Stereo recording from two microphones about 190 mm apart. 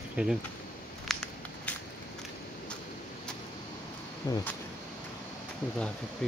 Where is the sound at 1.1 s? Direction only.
5° left (ahead or behind).